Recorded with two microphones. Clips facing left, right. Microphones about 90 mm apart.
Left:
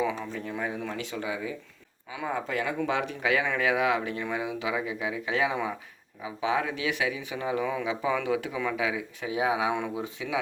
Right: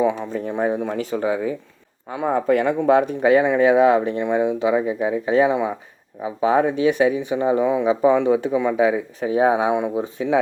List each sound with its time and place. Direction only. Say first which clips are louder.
0.0 s speech: right 9 dB; 30° right (ahead or behind)
2.2 s speech: right 12 dB; 55° right (ahead or behind); by 10.3 s 35° right (ahead or behind)